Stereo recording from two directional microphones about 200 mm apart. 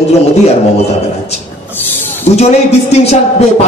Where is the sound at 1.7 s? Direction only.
10° left (ahead or behind).